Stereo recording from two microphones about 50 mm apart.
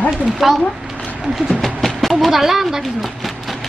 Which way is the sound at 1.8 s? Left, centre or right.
Centre.